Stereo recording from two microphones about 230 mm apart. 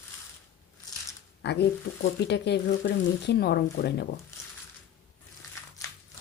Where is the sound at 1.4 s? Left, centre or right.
Left.